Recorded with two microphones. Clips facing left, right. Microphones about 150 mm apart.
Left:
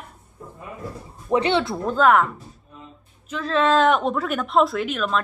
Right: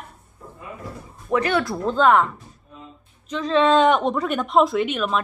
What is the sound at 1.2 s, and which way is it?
Speech, 30° left (ahead or behind).